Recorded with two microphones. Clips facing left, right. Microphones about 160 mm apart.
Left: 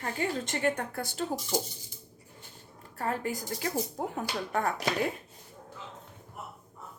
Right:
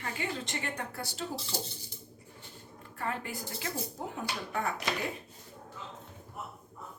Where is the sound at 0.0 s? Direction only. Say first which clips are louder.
Left 5 dB; 45° left (ahead or behind).